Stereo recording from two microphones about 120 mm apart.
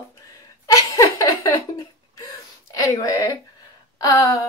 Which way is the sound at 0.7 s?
30° left (ahead or behind).